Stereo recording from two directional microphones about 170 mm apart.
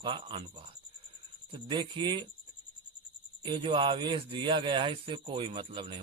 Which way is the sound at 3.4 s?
30° right (ahead or behind).